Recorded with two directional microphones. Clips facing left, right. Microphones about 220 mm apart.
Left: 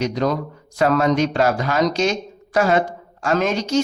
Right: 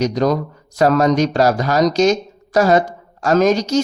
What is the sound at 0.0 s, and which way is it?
Speech, 40° right (ahead or behind).